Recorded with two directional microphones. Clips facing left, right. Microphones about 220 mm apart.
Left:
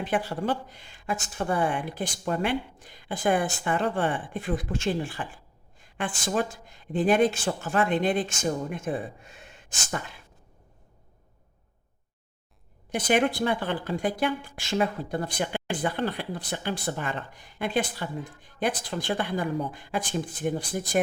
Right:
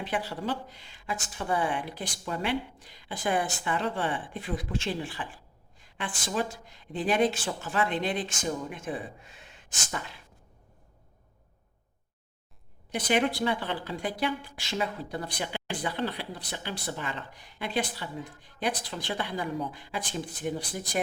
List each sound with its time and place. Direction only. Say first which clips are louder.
0.0 s a woman's voice: left 4 dB; 50° left (ahead or behind)
12.9 s a woman's voice: left 3 dB; 50° left (ahead or behind)